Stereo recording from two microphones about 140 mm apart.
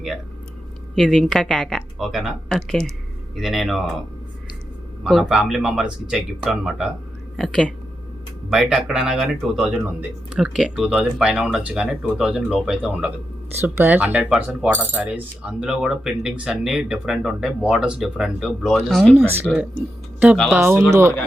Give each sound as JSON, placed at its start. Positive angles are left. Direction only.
{"t": 0.9, "sound": "speech", "side_deg": 0}
{"t": 5.0, "sound": "speech", "side_deg": 0}
{"t": 19.1, "sound": "speech", "side_deg": -15}
{"t": 19.5, "sound": "speech", "side_deg": -5}
{"t": 20.5, "sound": "speech", "side_deg": -15}